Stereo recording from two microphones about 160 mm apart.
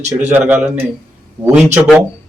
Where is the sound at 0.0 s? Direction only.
45° right (ahead or behind).